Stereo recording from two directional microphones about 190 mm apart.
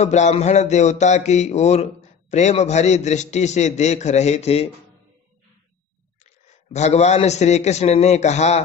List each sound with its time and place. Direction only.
0.0 s speech: 35° left (ahead or behind)
6.7 s speech: 35° left (ahead or behind)